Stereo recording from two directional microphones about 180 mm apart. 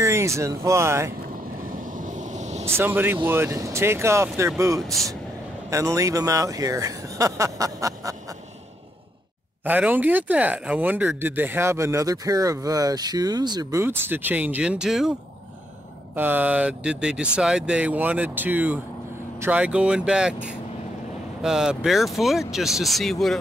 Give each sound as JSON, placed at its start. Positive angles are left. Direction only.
{"t": 0.0, "sound": "speech", "side_deg": -15}
{"t": 1.9, "sound": "vehicle", "side_deg": -45}
{"t": 2.6, "sound": "speech", "side_deg": -15}
{"t": 4.8, "sound": "speech", "side_deg": 0}
{"t": 5.7, "sound": "speech", "side_deg": -15}
{"t": 9.7, "sound": "speech", "side_deg": -10}
{"t": 16.2, "sound": "speech", "side_deg": -10}